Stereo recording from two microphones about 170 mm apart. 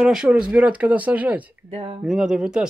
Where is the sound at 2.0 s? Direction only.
5° right (ahead or behind).